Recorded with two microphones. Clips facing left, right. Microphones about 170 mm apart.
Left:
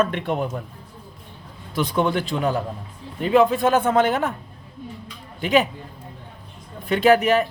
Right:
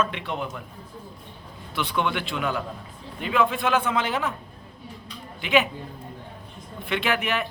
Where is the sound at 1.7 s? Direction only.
40° left (ahead or behind).